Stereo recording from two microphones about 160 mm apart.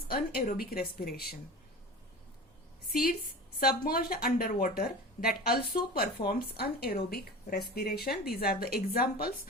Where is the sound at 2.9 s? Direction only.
70° left (ahead or behind).